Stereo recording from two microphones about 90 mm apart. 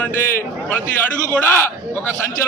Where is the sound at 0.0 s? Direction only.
25° left (ahead or behind).